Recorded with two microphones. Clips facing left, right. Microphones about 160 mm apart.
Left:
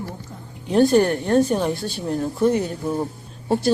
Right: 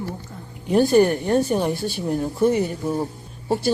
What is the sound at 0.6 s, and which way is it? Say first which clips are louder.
Speech: even; 10° right (ahead or behind).